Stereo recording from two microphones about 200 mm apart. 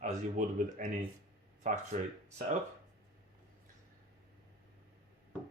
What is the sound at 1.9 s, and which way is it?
Speech, 35° right (ahead or behind).